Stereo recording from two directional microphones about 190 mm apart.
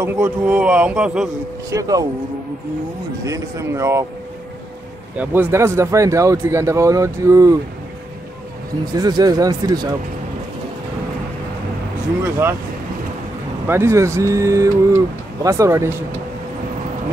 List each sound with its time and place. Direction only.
0.0 s speech: 10° right (ahead or behind)
1.7 s speech: 15° right (ahead or behind)
3.3 s speech: 15° right (ahead or behind)
5.1 s speech: 10° right (ahead or behind)
8.9 s speech: 20° right (ahead or behind)
12.2 s speech: 10° right (ahead or behind)
13.7 s speech: 15° right (ahead or behind)